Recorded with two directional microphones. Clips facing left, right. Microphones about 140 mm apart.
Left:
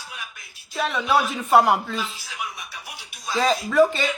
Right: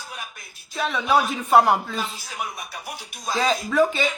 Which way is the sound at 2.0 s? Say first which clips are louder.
Right 1 dB; 45° right (ahead or behind).